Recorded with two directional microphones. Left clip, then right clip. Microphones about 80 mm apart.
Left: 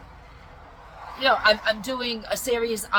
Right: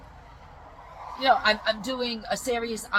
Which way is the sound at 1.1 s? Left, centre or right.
Left.